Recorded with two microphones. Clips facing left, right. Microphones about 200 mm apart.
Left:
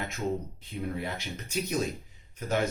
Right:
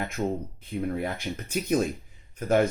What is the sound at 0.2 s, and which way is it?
Speech, 55° right (ahead or behind).